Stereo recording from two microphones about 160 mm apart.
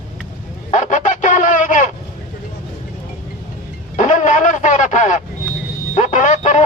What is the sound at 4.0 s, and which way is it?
Radio, 45° left (ahead or behind).